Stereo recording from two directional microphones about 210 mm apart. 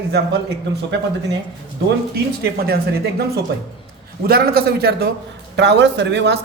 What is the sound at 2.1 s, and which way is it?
Speech, 50° right (ahead or behind).